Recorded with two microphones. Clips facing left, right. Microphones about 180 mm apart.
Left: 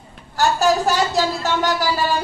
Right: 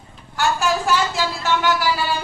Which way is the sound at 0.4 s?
40° left (ahead or behind).